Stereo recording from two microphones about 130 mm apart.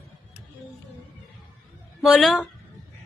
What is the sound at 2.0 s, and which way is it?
Speech, centre (ahead or behind).